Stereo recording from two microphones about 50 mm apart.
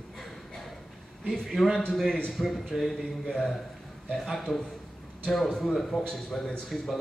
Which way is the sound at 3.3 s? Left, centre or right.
Centre.